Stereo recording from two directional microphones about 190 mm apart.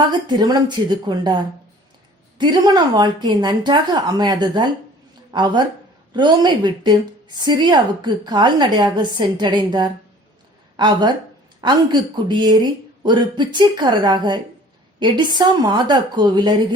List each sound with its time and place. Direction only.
0.1 s a woman's voice: 20° right (ahead or behind)
2.4 s a woman's voice: 25° right (ahead or behind)